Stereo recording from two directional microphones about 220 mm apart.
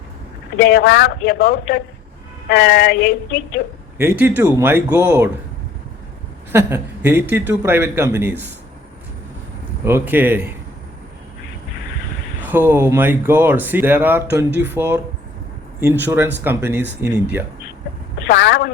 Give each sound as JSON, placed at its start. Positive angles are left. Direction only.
{"t": 0.6, "sound": "a woman's voice", "side_deg": 45}
{"t": 3.9, "sound": "speech", "side_deg": -10}
{"t": 6.5, "sound": "speech", "side_deg": -10}
{"t": 9.8, "sound": "speech", "side_deg": -10}
{"t": 12.4, "sound": "speech", "side_deg": -10}
{"t": 14.5, "sound": "speech", "side_deg": -50}
{"t": 14.8, "sound": "speech", "side_deg": -10}
{"t": 18.3, "sound": "speech", "side_deg": 55}